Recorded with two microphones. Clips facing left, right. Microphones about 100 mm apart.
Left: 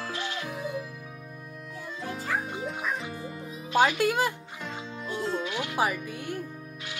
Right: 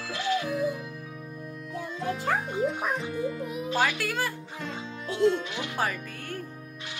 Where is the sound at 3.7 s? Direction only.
20° left (ahead or behind).